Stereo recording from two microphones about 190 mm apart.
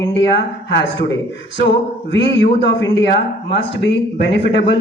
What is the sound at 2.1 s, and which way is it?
A man's voice, 70° left (ahead or behind).